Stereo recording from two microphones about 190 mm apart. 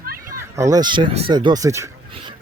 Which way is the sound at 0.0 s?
50° right (ahead or behind).